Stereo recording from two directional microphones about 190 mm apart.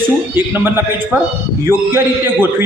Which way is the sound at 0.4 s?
10° right (ahead or behind).